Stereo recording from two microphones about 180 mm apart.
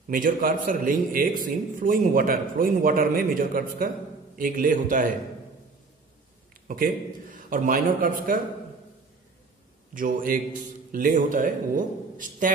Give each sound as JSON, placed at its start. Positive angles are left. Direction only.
{"t": 0.1, "sound": "a man's voice", "side_deg": -50}
{"t": 6.7, "sound": "a man's voice", "side_deg": -50}
{"t": 9.9, "sound": "a man's voice", "side_deg": -50}